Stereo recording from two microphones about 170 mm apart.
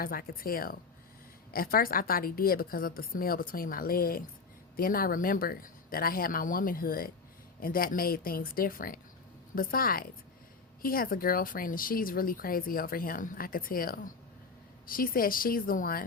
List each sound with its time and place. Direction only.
0.0 s speech: 60° left (ahead or behind)